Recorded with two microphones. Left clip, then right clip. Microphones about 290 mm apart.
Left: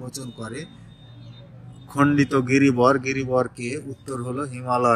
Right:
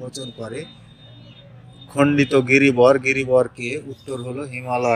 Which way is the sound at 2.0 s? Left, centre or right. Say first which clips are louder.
Right 3 dB; centre.